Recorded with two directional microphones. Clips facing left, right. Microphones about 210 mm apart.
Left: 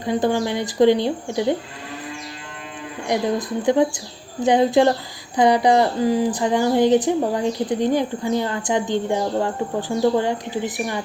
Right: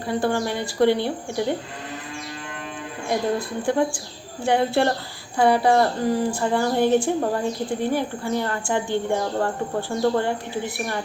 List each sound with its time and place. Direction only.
0.0 s speech: 20° left (ahead or behind)
3.1 s speech: 20° left (ahead or behind)